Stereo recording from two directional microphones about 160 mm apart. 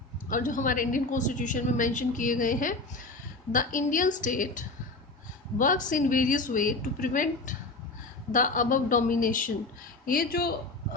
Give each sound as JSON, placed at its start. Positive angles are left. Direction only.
{"t": 0.3, "sound": "a woman's voice", "side_deg": 55}
{"t": 10.1, "sound": "speech", "side_deg": 65}